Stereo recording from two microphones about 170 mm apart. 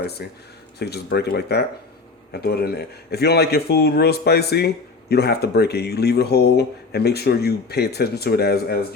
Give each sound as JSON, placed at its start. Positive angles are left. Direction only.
{"t": 0.0, "sound": "speech", "side_deg": 70}